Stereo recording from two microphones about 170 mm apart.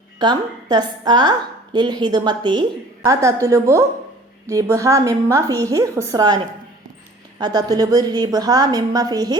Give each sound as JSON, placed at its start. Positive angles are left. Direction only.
{"t": 0.2, "sound": "a woman's voice", "side_deg": -25}